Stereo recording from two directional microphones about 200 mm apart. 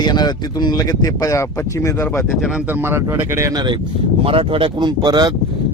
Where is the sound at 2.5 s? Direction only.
5° right (ahead or behind).